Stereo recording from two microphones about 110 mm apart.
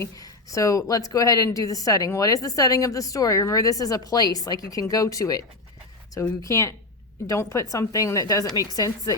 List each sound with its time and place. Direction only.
0.0 s a woman's voice: 30° left (ahead or behind)